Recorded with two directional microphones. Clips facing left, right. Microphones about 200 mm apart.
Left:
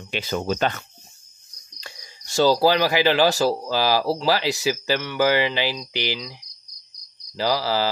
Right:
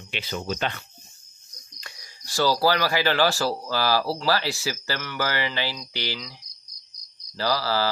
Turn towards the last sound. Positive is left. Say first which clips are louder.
# left 2 dB
turn(degrees=15)  # may be behind; listen again after turning